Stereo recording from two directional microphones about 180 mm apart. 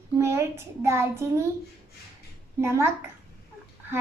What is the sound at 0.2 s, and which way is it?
A child's voice, 15° right (ahead or behind).